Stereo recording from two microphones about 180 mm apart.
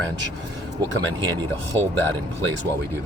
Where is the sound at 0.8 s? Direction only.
20° right (ahead or behind).